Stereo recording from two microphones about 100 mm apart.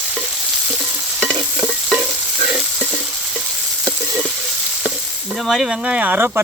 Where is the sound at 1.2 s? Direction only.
25° right (ahead or behind).